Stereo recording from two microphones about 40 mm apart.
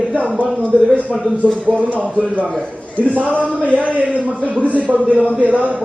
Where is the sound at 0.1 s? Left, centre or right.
Right.